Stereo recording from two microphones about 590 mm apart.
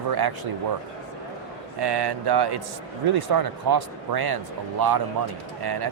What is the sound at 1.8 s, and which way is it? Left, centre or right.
Speech, right.